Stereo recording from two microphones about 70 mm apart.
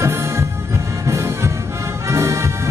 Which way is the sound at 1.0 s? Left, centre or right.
Right.